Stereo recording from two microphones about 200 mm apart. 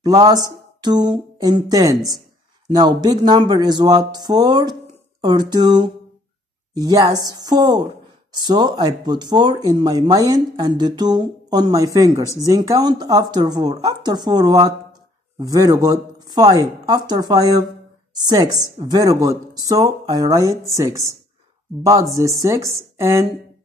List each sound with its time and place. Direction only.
0.0 s speech: 20° right (ahead or behind)
22.1 s speech: 15° right (ahead or behind)